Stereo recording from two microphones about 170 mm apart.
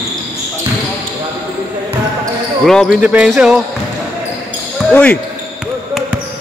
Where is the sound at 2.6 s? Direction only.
Centre (ahead or behind).